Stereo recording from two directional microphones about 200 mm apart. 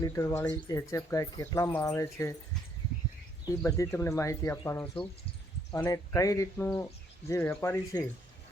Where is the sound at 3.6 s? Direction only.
15° left (ahead or behind).